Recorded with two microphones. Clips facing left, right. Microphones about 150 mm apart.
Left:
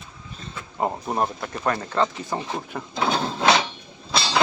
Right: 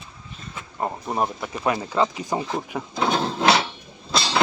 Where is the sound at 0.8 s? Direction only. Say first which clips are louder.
Left 2 dB; 10° left (ahead or behind).